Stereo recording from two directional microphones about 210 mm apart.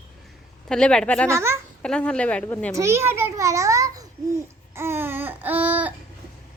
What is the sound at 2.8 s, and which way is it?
A child's voice, 10° right (ahead or behind).